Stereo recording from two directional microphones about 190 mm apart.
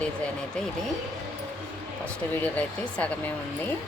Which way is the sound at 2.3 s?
10° left (ahead or behind).